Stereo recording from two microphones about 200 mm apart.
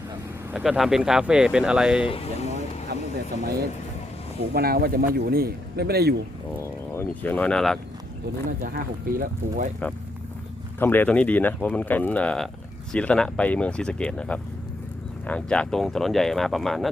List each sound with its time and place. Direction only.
0.5 s speech: 5° right (ahead or behind)
2.0 s speech: 30° left (ahead or behind)
2.9 s vehicle: 55° right (ahead or behind)
4.5 s speech: 50° right (ahead or behind)
6.6 s speech: 10° left (ahead or behind)
8.4 s speech: 45° right (ahead or behind)
10.8 s speech: 10° left (ahead or behind)